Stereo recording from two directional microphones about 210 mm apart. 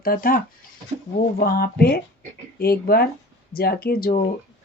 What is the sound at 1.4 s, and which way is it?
Speech, 45° left (ahead or behind).